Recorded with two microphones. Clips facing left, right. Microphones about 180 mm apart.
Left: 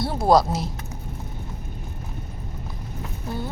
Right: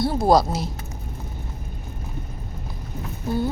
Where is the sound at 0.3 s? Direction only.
Centre (ahead or behind).